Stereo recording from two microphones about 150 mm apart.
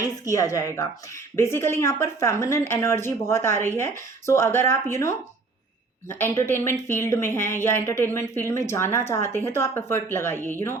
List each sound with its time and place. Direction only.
0.0 s speech: 20° left (ahead or behind)